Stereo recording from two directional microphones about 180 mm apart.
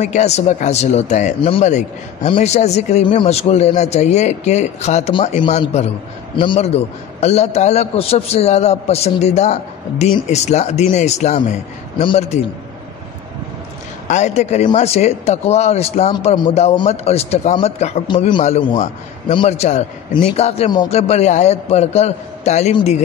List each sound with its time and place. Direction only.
0.0 s a man's voice: 40° left (ahead or behind)
14.0 s a man's voice: 40° left (ahead or behind)